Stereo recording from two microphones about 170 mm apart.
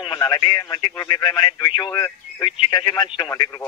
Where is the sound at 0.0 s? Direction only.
25° left (ahead or behind).